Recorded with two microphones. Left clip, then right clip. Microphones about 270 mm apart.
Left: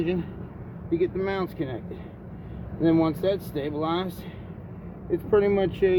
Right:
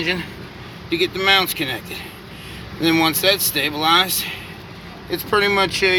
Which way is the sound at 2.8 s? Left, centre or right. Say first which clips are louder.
Right 6 dB; right.